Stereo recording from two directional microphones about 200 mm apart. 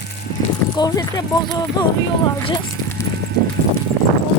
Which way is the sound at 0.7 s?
20° left (ahead or behind).